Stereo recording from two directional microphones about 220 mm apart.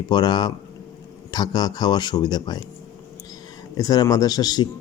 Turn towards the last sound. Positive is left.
turn(degrees=15)  # may be behind; listen again after turning